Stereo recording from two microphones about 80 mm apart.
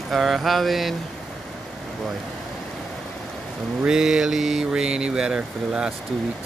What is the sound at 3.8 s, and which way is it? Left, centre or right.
Speech, centre.